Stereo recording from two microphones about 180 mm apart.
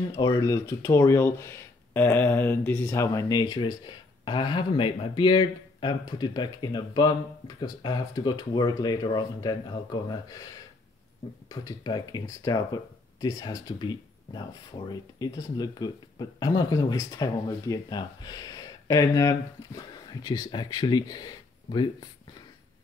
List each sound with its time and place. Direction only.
0.1 s speech: 25° left (ahead or behind)
11.4 s speech: 20° left (ahead or behind)